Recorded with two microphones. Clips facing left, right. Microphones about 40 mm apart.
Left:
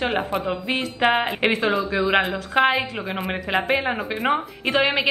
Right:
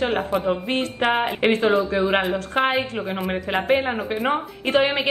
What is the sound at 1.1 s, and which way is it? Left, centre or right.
Speech, centre.